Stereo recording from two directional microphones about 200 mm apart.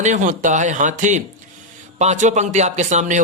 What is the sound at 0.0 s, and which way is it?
Speech, 40° right (ahead or behind).